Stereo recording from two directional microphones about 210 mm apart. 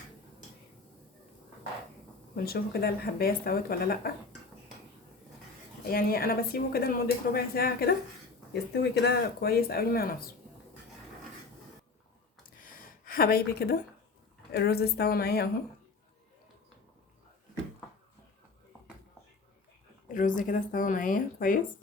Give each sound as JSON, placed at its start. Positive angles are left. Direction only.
{"t": 2.3, "sound": "speech", "side_deg": 45}
{"t": 5.8, "sound": "speech", "side_deg": 45}
{"t": 12.4, "sound": "a sound", "side_deg": 40}
{"t": 14.5, "sound": "speech", "side_deg": 50}
{"t": 20.1, "sound": "speech", "side_deg": 40}